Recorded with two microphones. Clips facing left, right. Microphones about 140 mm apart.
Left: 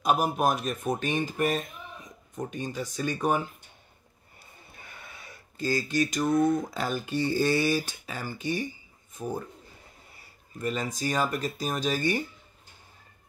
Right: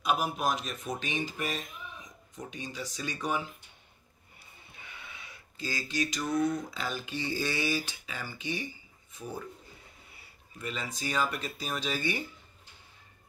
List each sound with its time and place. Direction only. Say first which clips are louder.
0.0 s speech: left 5 dB; 45° left (ahead or behind)
4.7 s speech: left 1 dB; 45° left (ahead or behind)